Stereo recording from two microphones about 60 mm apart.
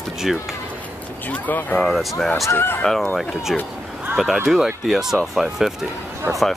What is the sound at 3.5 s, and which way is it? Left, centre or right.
Speech, centre.